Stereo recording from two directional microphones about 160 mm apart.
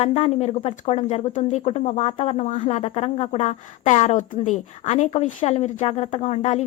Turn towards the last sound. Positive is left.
turn(degrees=40)  # may be behind; listen again after turning